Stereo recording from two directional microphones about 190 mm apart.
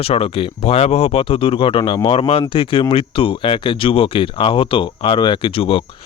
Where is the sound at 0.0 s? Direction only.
30° left (ahead or behind).